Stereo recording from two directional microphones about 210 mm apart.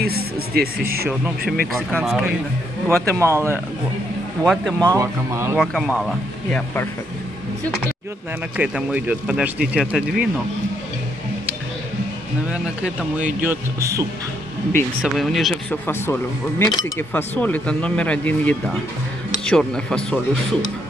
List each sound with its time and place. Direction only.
0.0 s speech: 50° right (ahead or behind)
1.7 s speech: centre (ahead or behind)
2.9 s speech: 15° right (ahead or behind)
4.5 s speech: 5° left (ahead or behind)
4.9 s speech: 15° right (ahead or behind)
5.6 s speech: centre (ahead or behind)
8.5 s speech: 5° right (ahead or behind)
12.4 s speech: 5° right (ahead or behind)
14.7 s speech: centre (ahead or behind)